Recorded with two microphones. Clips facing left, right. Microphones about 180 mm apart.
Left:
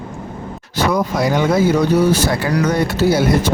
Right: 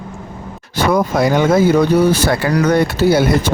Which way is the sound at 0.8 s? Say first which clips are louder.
Right 3 dB; 55° right (ahead or behind).